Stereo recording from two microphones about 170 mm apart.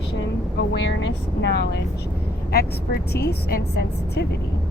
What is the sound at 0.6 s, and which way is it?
Speech, 90° left.